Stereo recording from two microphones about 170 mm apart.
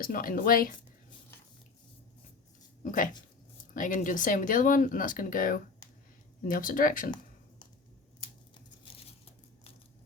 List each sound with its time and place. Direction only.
0.0 s speech: 55° left (ahead or behind)
2.8 s speech: 50° left (ahead or behind)
8.5 s tearing: 30° left (ahead or behind)